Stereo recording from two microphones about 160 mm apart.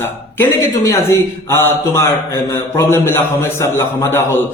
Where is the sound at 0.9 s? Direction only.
20° left (ahead or behind).